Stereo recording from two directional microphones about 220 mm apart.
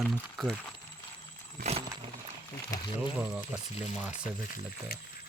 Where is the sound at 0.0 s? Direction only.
Centre (ahead or behind).